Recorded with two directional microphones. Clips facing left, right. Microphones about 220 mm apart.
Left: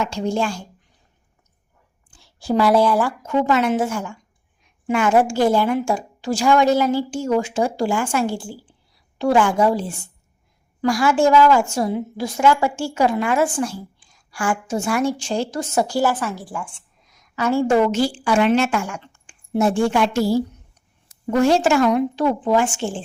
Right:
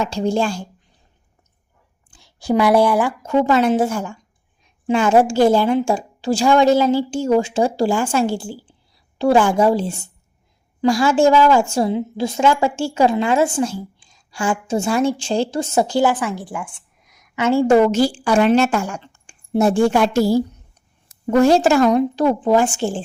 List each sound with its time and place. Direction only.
0.0 s a woman's voice: 35° right (ahead or behind)
2.1 s a woman's voice: 15° right (ahead or behind)
3.2 s a woman's voice: 35° right (ahead or behind)